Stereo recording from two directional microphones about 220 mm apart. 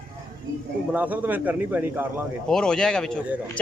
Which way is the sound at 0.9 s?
5° right (ahead or behind).